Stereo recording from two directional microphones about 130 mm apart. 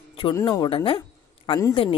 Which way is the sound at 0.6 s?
40° left (ahead or behind).